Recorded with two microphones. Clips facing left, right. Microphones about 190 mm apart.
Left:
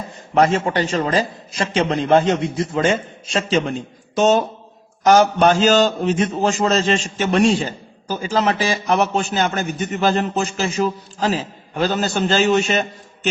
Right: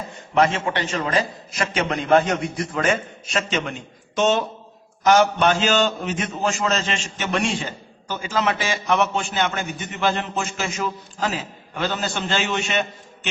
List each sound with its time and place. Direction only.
0.3 s a man's voice: 40° left (ahead or behind)